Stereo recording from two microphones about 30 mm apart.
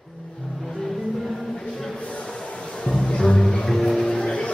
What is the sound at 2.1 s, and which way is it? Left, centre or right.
Music, left.